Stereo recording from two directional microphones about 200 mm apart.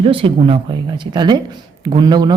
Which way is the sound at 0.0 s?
25° right (ahead or behind).